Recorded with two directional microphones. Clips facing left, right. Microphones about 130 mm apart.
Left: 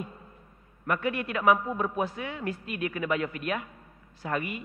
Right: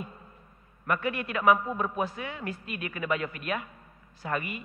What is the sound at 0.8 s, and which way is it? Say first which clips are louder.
A man's voice: left 1 dB; 25° left (ahead or behind).